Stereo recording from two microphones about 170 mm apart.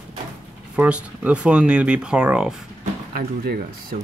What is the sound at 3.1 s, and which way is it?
Speech, 65° right (ahead or behind).